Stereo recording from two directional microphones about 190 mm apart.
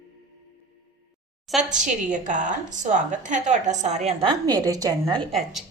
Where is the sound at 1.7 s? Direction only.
40° right (ahead or behind); by 5.2 s 20° right (ahead or behind).